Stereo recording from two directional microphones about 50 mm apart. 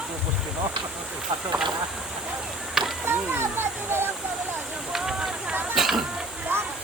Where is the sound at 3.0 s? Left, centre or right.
Right.